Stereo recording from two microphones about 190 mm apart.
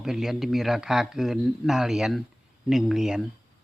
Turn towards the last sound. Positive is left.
turn(degrees=0)  # may be behind; listen again after turning